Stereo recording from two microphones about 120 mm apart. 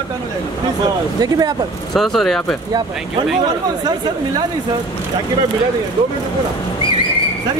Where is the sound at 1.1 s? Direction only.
30° right (ahead or behind).